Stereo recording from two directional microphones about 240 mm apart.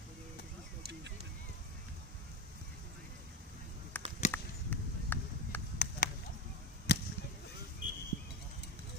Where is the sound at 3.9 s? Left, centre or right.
Centre.